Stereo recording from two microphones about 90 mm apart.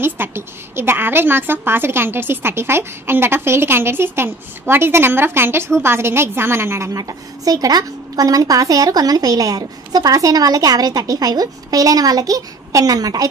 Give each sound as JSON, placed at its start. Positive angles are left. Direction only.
{"t": 0.0, "sound": "a woman's voice", "side_deg": -25}